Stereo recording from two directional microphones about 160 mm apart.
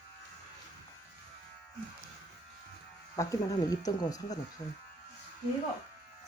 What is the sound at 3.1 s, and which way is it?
Speech, 20° left (ahead or behind).